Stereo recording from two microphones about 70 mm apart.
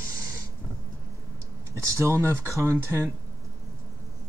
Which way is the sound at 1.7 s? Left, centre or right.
Right.